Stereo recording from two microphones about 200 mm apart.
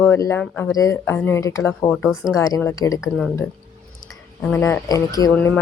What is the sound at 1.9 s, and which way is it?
Speech, centre (ahead or behind).